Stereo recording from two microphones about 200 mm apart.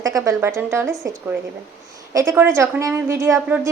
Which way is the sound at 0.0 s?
15° right (ahead or behind).